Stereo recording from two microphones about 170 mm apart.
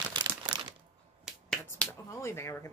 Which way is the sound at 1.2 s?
5° left (ahead or behind).